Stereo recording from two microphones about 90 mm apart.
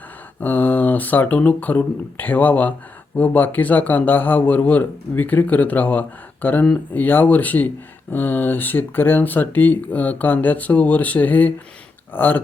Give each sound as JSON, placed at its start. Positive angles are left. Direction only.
{"t": 0.3, "sound": "a man's voice", "side_deg": 20}